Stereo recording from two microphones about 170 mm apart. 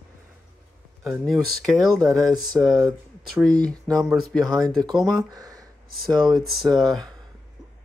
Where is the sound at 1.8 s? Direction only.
20° right (ahead or behind).